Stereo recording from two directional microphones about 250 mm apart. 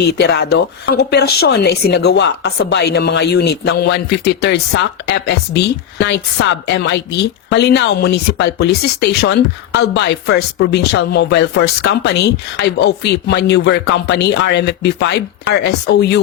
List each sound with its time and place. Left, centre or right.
0.0 s speech: left